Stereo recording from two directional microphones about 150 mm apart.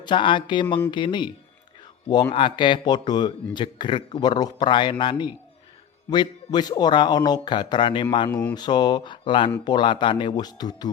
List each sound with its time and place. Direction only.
0.0 s speech: 30° left (ahead or behind)
2.3 s speech: 35° left (ahead or behind)